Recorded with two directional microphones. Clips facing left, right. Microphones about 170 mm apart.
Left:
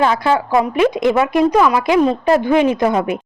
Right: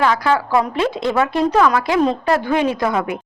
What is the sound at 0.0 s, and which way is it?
A woman's voice, 25° left (ahead or behind).